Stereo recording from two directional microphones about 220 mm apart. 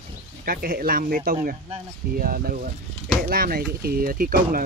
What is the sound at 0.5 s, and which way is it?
Speech, 40° right (ahead or behind).